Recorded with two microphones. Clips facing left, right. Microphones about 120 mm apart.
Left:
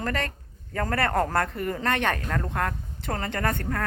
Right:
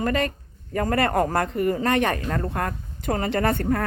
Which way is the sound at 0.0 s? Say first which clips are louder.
Right 6 dB; 15° right (ahead or behind).